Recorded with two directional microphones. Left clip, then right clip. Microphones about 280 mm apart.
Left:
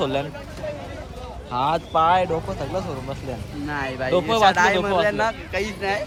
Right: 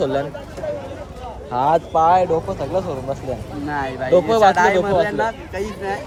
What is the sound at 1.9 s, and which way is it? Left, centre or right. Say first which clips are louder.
Speech: right 1 dB; centre.